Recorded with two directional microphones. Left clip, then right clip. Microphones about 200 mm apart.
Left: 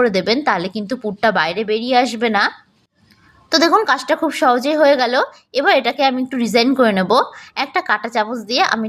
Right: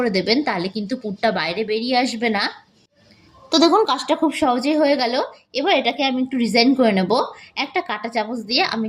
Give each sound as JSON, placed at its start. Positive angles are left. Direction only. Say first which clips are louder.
{"t": 0.0, "sound": "a woman's voice", "louder": "left 4 dB", "side_deg": 30}
{"t": 4.0, "sound": "a woman's voice", "louder": "left 3 dB", "side_deg": 30}